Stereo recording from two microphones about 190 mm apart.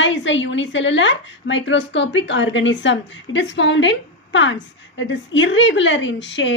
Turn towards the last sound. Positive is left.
turn(degrees=70)  # may be behind; listen again after turning